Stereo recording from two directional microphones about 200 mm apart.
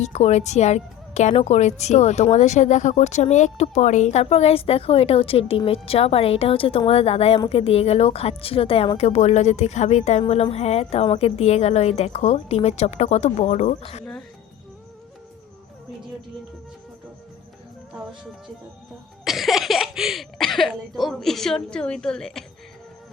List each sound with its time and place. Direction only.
0.0 s a woman's voice: 35° left (ahead or behind)
14.0 s speech: centre (ahead or behind)
19.2 s speech: centre (ahead or behind)